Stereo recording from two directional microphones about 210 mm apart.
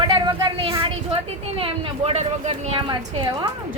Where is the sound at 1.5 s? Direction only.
25° right (ahead or behind).